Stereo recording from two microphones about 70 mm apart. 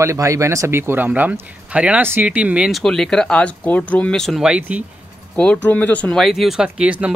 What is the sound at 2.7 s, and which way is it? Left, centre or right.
Speech, centre.